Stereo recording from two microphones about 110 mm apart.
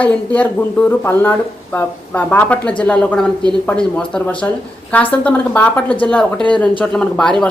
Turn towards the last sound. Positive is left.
turn(degrees=5)  # may be behind; listen again after turning